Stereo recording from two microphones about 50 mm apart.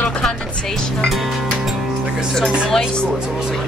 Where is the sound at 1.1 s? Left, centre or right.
Centre.